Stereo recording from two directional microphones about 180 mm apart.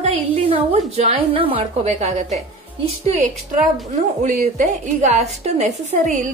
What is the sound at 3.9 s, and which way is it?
A woman's voice, 45° right (ahead or behind).